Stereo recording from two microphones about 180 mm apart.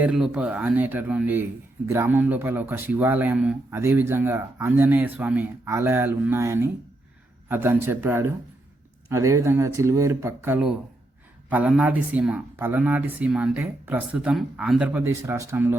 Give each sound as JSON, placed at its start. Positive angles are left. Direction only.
{"t": 0.0, "sound": "a man's voice", "side_deg": -5}